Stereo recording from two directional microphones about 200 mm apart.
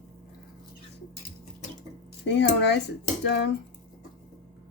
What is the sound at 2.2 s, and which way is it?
Speech, 60° left (ahead or behind).